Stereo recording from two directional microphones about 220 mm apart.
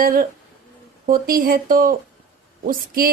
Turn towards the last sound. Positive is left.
turn(degrees=-40)  # may be behind; listen again after turning